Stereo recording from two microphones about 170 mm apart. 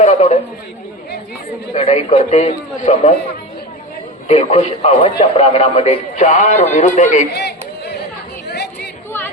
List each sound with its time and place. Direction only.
0.0 s a man's voice: 45° left (ahead or behind)
1.7 s a man's voice: 45° left (ahead or behind)
4.3 s a man's voice: 40° left (ahead or behind)
7.3 s a sound: 75° left (ahead or behind)
8.4 s chatter: 75° left (ahead or behind)